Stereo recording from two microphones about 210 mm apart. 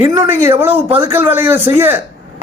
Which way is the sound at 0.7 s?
25° right (ahead or behind).